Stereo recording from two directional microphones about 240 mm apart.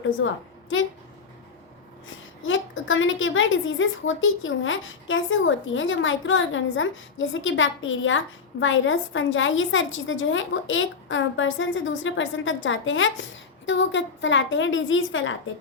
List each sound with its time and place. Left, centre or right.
2.4 s a woman's voice: left